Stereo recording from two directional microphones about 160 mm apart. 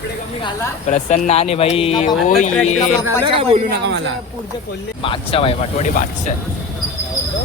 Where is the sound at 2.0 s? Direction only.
50° left (ahead or behind).